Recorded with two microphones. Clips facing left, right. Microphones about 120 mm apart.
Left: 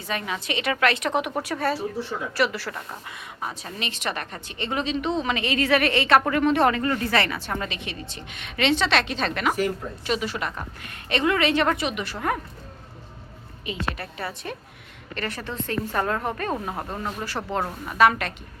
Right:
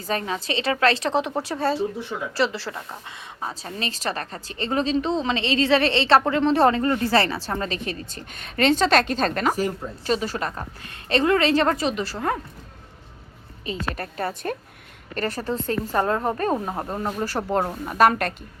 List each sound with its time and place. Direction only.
0.0 s a woman's voice: 35° right (ahead or behind)
13.7 s a woman's voice: 45° right (ahead or behind)
15.9 s a woman's voice: 25° right (ahead or behind)
17.2 s a woman's voice: 40° right (ahead or behind)